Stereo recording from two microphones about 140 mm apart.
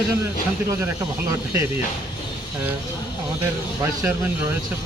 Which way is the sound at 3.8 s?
15° right (ahead or behind).